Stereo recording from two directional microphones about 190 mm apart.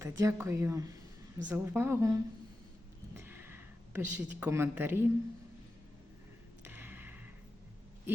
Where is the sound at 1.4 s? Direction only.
10° right (ahead or behind).